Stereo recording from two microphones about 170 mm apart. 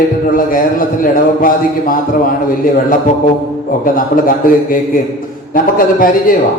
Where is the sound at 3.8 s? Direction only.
55° left (ahead or behind).